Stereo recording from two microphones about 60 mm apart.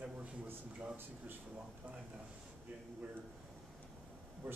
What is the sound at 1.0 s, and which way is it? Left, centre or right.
Speech, right.